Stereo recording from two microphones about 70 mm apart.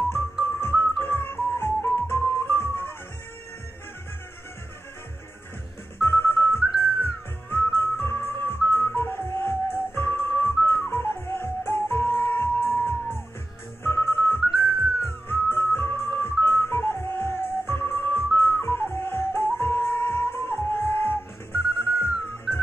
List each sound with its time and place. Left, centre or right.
0.1 s music: left
5.9 s music: left